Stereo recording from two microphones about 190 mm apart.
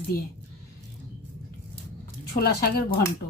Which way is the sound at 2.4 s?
55° left (ahead or behind).